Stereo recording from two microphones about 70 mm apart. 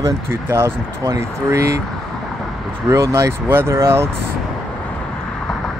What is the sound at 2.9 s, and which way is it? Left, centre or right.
Speech, right.